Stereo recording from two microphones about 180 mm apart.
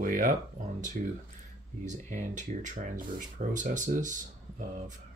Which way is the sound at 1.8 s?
45° right (ahead or behind).